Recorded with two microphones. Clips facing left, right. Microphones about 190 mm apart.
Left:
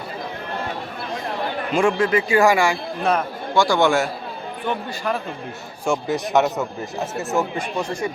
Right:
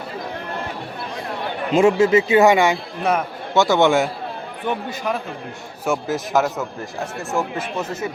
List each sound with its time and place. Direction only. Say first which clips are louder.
1.7 s a man's voice: right 5 dB; 25° right (ahead or behind)
5.8 s speech: even; centre (ahead or behind)